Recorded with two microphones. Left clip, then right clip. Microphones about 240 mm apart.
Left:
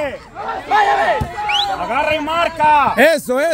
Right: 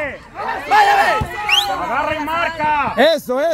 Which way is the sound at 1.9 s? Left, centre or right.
Left.